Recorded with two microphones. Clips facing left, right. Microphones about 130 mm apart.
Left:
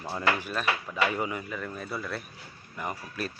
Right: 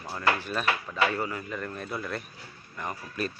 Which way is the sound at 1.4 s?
Centre (ahead or behind).